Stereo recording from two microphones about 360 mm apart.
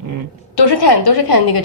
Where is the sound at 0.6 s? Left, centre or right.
Left.